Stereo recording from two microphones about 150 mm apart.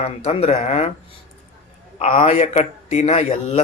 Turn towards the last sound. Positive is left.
turn(degrees=45)  # may be behind; listen again after turning